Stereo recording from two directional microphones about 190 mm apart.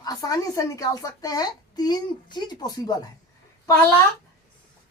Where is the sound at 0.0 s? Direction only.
20° left (ahead or behind).